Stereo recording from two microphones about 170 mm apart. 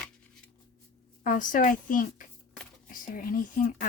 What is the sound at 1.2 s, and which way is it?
Speech, 50° left (ahead or behind).